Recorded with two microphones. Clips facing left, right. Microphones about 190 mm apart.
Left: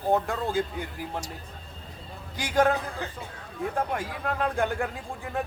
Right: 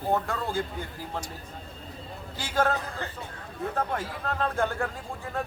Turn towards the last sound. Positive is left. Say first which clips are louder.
# left 1 dB
turn(degrees=15)  # may be behind; listen again after turning